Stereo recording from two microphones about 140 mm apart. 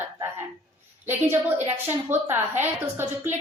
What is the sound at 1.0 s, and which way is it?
A woman's voice, 15° right (ahead or behind).